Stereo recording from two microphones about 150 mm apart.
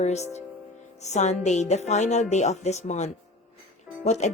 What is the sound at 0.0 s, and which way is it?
Speech, 50° left (ahead or behind).